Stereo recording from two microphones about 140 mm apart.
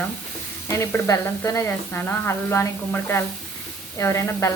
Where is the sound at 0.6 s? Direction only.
20° left (ahead or behind).